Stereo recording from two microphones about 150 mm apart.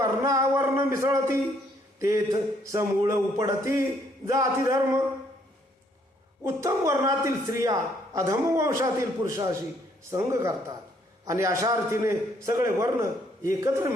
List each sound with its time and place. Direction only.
0.0 s a man's voice: 20° right (ahead or behind)
6.4 s a man's voice: 20° right (ahead or behind)